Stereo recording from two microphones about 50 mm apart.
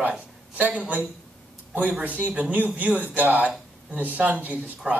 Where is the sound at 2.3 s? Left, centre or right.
Right.